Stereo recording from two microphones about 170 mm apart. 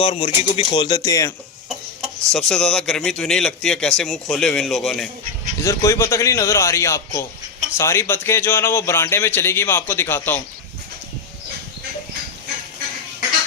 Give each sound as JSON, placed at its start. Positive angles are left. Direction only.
{"t": 0.0, "sound": "speech", "side_deg": 35}
{"t": 2.0, "sound": "speech", "side_deg": 5}
{"t": 5.6, "sound": "speech", "side_deg": 20}